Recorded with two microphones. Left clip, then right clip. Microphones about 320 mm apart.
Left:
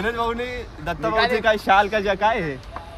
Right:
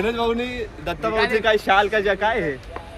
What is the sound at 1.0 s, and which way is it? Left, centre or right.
Speech, left.